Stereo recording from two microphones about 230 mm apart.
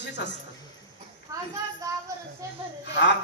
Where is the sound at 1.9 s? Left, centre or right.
Centre.